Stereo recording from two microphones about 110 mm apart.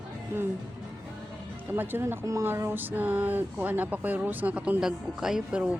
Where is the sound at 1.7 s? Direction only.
20° right (ahead or behind).